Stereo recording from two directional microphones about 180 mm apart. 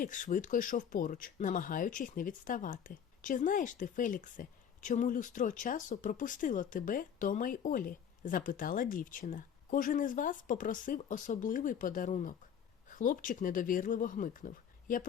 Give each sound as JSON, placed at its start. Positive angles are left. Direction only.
{"t": 0.0, "sound": "speech", "side_deg": 45}